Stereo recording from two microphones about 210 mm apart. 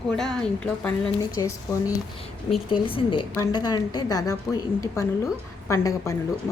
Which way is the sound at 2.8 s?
25° left (ahead or behind).